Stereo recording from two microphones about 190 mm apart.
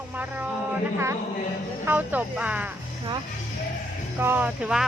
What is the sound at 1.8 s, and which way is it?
Speech, 10° right (ahead or behind).